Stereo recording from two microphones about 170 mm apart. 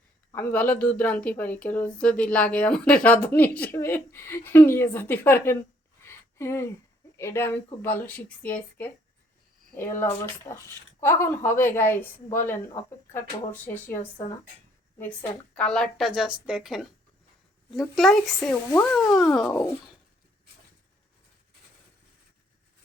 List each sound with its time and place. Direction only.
0.3 s a woman's voice: 10° left (ahead or behind)
6.1 s a sound: 15° left (ahead or behind)
7.2 s a woman's voice: 15° left (ahead or behind)
14.0 s speech: 30° left (ahead or behind)
14.9 s a woman's voice: 10° left (ahead or behind)